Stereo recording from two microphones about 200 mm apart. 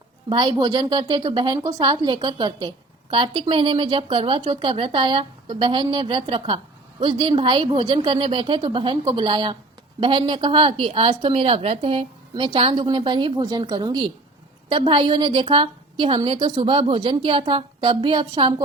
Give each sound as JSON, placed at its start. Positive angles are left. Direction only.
{"t": 0.3, "sound": "a woman's voice", "side_deg": -20}